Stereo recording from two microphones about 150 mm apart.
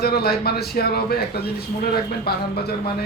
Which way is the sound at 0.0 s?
90° left.